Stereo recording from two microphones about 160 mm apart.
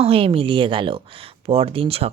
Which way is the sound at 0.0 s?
35° right (ahead or behind).